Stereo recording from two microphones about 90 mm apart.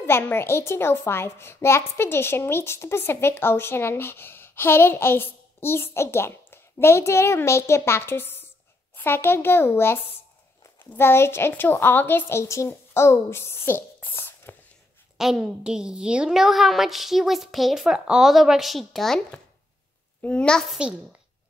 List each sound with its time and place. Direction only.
0.0 s a child's voice: 25° left (ahead or behind)
15.1 s a woman's voice: 5° right (ahead or behind)